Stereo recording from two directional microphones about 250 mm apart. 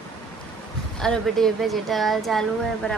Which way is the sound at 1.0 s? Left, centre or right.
Centre.